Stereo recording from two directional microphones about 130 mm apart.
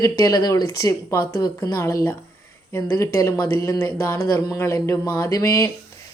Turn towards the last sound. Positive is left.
turn(degrees=25)  # may be behind; listen again after turning